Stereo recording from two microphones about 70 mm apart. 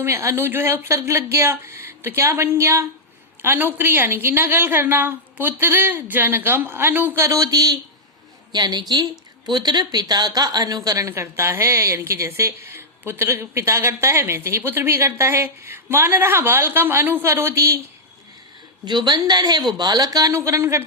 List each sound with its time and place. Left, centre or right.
0.0 s a woman's voice: right
7.2 s speech: right
8.5 s a woman's voice: right
11.1 s a woman's voice: right
18.9 s a woman's voice: right
19.2 s a woman's voice: right